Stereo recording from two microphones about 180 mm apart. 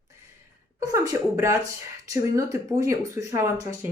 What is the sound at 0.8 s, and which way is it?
Speech, 15° right (ahead or behind).